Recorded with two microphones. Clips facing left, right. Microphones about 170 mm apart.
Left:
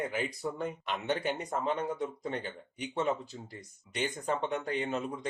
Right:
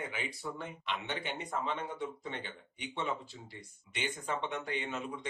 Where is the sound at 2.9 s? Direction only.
40° left (ahead or behind).